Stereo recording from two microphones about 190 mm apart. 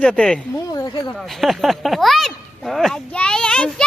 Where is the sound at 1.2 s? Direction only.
Centre (ahead or behind).